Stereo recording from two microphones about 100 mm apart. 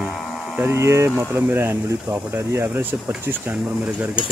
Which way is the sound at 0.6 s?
25° right (ahead or behind).